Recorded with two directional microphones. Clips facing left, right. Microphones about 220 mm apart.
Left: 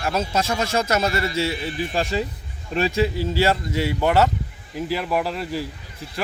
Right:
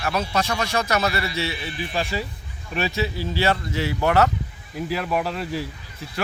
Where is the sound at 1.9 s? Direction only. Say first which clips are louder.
Left 2 dB; 30° left (ahead or behind).